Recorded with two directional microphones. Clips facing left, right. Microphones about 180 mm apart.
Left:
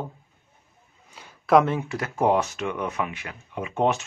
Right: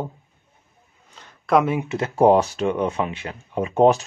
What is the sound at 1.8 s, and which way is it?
Speech, 25° right (ahead or behind).